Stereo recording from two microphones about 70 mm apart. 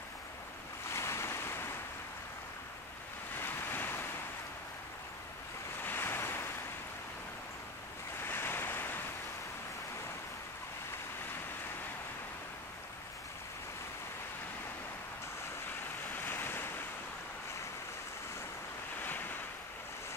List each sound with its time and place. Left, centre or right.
0.8 s waves: left
3.3 s waves: left
5.9 s waves: left
8.2 s waves: left
16.1 s waves: left